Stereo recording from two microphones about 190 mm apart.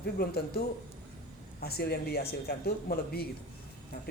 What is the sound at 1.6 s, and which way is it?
Speech, 55° left (ahead or behind).